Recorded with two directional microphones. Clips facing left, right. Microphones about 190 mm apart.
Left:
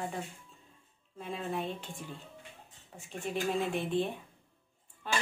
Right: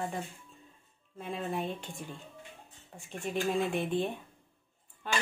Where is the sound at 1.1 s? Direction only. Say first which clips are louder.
Right 1 dB; centre (ahead or behind).